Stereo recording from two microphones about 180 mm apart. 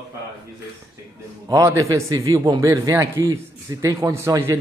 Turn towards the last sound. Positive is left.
turn(degrees=-15)  # may be behind; listen again after turning